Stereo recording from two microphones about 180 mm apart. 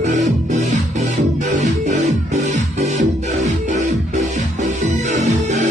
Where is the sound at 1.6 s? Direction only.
40° right (ahead or behind).